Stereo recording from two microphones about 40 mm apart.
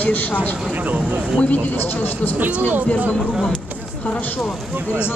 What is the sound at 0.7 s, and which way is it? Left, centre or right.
Speech, right.